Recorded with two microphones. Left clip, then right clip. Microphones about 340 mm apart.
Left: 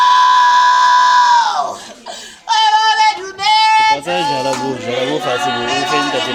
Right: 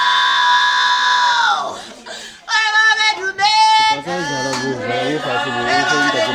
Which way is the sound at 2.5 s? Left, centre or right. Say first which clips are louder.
Left 2 dB; centre.